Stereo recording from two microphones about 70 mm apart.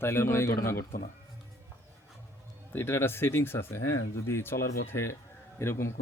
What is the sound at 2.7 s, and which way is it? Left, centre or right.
Speech, left.